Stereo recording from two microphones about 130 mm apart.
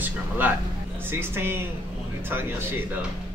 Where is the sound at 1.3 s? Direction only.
15° right (ahead or behind).